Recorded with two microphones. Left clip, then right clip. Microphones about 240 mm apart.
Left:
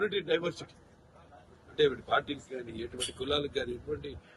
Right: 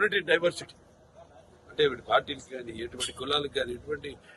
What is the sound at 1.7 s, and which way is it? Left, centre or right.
A man's voice, centre.